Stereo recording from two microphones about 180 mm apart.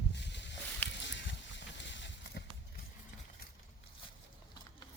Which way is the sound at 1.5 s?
85° left.